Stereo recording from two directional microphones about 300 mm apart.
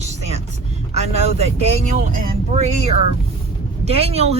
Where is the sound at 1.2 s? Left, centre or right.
Right.